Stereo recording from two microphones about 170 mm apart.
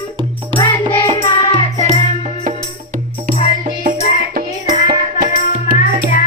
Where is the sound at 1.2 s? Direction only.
30° left (ahead or behind).